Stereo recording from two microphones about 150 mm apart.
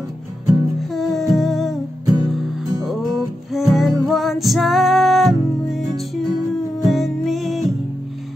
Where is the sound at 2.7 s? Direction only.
25° right (ahead or behind).